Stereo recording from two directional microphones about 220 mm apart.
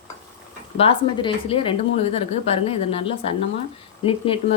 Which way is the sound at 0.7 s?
25° left (ahead or behind).